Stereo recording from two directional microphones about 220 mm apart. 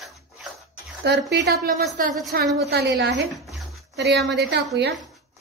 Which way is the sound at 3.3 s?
Centre (ahead or behind).